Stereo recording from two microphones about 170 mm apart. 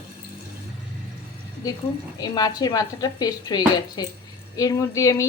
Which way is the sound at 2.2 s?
25° left (ahead or behind).